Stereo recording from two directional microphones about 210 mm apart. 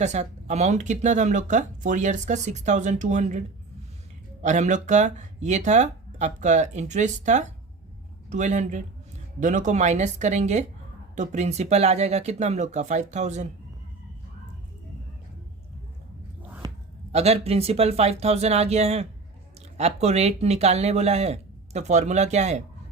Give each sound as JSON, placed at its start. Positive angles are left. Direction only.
{"t": 0.0, "sound": "speech", "side_deg": -35}
{"t": 4.4, "sound": "speech", "side_deg": -35}
{"t": 17.1, "sound": "speech", "side_deg": -30}